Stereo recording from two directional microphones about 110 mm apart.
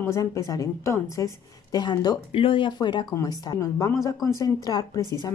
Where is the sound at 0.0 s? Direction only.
30° left (ahead or behind).